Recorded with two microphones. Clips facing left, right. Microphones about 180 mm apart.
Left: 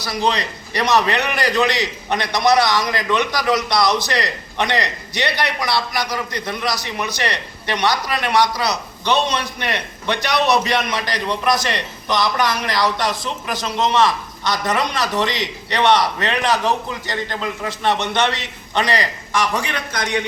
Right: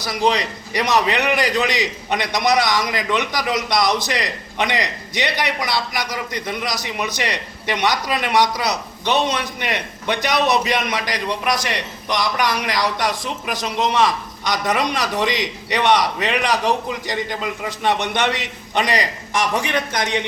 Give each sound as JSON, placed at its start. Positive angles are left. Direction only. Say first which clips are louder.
{"t": 0.0, "sound": "a man's voice", "louder": "right 1 dB", "side_deg": -15}